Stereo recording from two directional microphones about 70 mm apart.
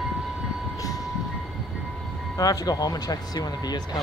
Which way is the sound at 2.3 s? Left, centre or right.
Left.